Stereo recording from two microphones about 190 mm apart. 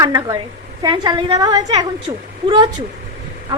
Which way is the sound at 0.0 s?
20° right (ahead or behind).